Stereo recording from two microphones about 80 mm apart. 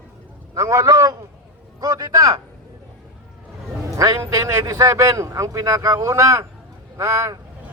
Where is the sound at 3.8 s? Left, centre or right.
Right.